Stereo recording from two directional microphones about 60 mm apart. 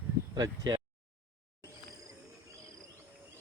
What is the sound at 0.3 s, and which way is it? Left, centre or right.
Speech, right.